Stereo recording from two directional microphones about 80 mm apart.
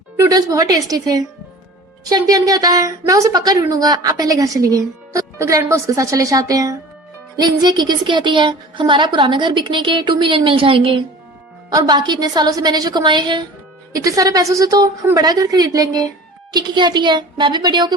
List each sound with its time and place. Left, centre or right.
0.3 s speech: right
7.3 s a woman's voice: right
11.9 s a woman's voice: right
13.9 s speech: right
16.5 s a woman's voice: right